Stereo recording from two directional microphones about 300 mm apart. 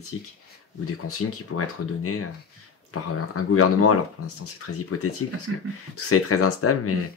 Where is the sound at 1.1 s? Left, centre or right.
Left.